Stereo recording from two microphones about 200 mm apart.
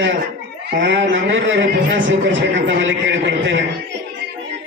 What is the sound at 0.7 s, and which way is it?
A man's voice, 60° right (ahead or behind).